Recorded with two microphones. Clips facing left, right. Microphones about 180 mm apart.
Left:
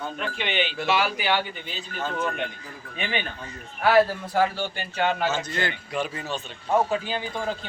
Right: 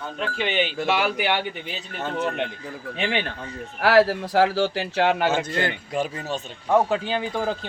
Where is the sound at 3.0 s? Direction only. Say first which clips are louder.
Right 3 dB; 90° right; by 6.4 s 45° right (ahead or behind).